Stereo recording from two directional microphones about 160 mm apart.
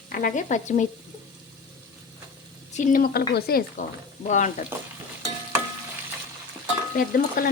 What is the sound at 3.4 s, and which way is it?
Speech, 75° left (ahead or behind).